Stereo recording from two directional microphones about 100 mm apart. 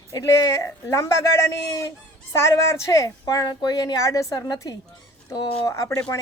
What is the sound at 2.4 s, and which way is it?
Speech, 30° left (ahead or behind).